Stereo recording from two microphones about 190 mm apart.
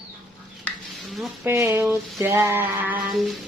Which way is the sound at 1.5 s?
15° right (ahead or behind).